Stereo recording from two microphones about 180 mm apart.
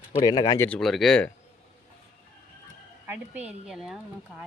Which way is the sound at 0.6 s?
5° left (ahead or behind).